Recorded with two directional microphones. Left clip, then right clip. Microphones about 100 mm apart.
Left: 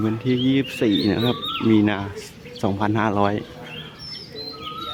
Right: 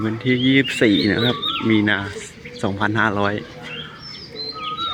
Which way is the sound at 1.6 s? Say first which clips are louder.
Even; 15° left (ahead or behind).